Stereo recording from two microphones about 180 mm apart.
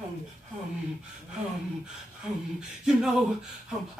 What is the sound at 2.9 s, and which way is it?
Speech, 5° right (ahead or behind).